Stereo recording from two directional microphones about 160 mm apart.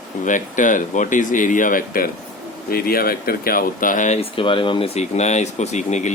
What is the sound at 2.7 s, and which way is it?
Speech, 70° left (ahead or behind).